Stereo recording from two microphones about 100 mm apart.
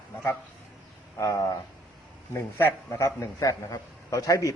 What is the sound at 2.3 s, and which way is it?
A man's voice, 25° left (ahead or behind).